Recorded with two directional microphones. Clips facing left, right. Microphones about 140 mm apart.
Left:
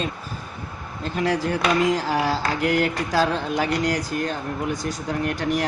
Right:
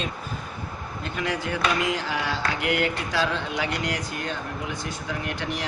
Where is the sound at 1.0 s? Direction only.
35° left (ahead or behind).